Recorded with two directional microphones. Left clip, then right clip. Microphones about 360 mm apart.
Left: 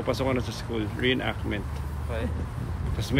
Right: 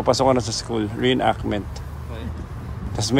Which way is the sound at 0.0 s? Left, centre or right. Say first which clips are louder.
Right 10 dB; centre.